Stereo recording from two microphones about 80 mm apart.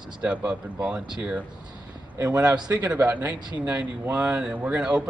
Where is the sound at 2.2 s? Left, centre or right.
Right.